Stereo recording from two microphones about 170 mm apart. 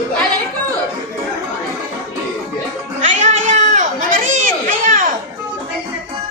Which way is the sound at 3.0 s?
45° right (ahead or behind).